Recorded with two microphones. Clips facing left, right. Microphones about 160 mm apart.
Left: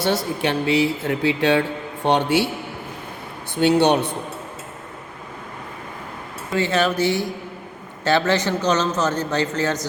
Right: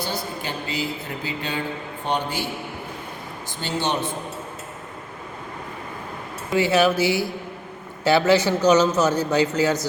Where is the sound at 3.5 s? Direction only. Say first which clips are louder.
Left 9 dB; 65° left (ahead or behind).